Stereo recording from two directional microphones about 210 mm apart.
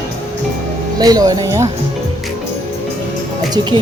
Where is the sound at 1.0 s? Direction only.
15° right (ahead or behind).